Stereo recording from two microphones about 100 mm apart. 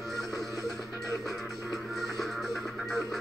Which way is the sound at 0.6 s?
35° left (ahead or behind).